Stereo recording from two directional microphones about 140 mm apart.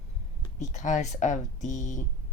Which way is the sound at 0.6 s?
60° left (ahead or behind).